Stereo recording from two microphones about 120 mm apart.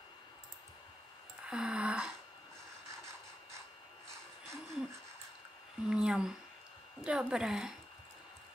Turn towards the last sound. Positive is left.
turn(degrees=-5)  # may be behind; listen again after turning